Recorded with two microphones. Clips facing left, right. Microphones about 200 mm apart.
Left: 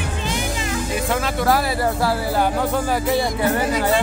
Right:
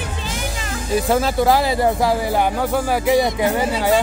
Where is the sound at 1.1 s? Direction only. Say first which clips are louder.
Right 4 dB; 30° right (ahead or behind); by 3.5 s 15° right (ahead or behind).